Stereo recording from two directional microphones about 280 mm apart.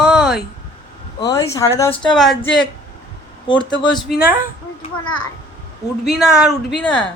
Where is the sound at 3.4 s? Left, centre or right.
Centre.